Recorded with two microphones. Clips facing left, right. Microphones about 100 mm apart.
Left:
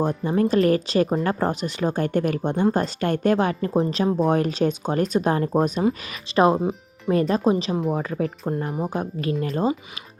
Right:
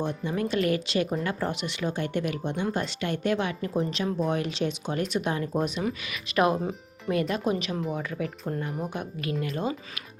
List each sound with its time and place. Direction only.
0.0 s speech: 40° left (ahead or behind)
6.3 s speech: 30° left (ahead or behind)
7.1 s speech: 35° left (ahead or behind)